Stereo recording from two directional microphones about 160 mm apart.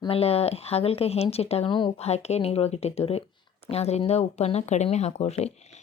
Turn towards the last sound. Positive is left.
turn(degrees=45)  # may be behind; listen again after turning